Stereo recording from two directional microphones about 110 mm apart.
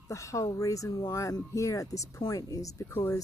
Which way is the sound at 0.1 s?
30° left (ahead or behind).